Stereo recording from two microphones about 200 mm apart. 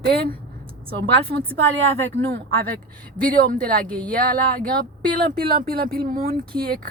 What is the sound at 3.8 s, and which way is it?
Speech, 5° left (ahead or behind).